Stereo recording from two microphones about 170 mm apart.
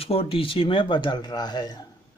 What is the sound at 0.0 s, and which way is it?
Speech, 35° left (ahead or behind).